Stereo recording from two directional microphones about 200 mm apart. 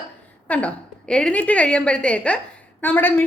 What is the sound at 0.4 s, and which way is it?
A woman's voice, 5° left (ahead or behind).